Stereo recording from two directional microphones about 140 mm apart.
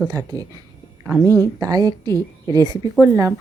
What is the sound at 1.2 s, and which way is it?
Speech, 20° left (ahead or behind).